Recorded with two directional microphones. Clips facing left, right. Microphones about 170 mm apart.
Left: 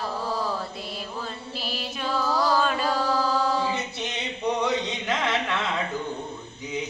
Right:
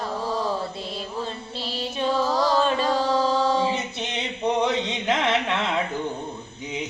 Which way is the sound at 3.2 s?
25° right (ahead or behind).